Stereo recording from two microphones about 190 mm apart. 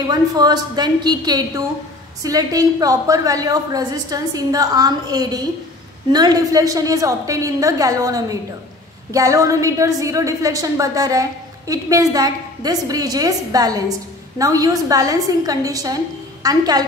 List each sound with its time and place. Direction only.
0.1 s a woman's voice: 20° right (ahead or behind)